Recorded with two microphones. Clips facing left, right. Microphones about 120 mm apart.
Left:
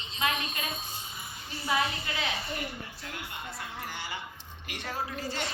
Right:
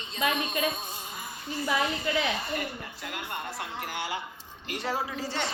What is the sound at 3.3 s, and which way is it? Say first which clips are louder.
Speech: right 4 dB; 60° right (ahead or behind).